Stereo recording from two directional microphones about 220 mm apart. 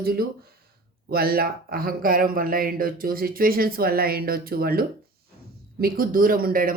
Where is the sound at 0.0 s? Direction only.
45° right (ahead or behind).